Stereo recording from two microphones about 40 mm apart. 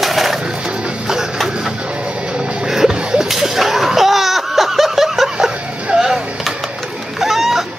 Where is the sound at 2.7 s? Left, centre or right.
Centre.